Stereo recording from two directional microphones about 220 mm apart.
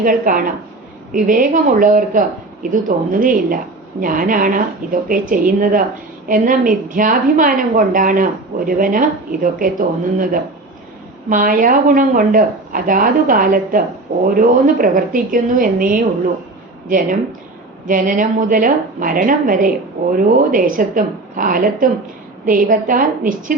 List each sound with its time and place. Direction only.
0.0 s a woman's voice: 40° right (ahead or behind)
17.8 s a woman's voice: 40° right (ahead or behind)